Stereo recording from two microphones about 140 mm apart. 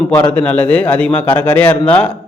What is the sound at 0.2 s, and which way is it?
A man's voice, 10° left (ahead or behind).